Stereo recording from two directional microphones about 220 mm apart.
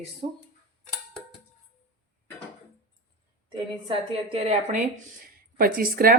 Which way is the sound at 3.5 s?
25° right (ahead or behind).